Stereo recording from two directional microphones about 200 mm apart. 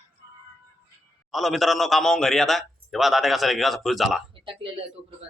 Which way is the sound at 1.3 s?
Centre (ahead or behind).